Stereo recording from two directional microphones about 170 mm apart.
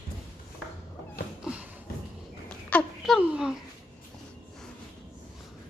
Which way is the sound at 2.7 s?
5° left (ahead or behind).